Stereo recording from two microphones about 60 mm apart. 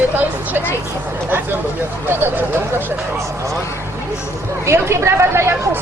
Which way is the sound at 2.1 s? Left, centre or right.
Right.